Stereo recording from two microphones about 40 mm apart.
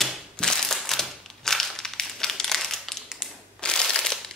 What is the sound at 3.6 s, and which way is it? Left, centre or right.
Crushing, left.